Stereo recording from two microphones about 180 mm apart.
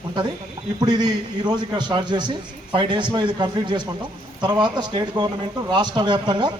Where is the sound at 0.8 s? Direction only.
20° right (ahead or behind).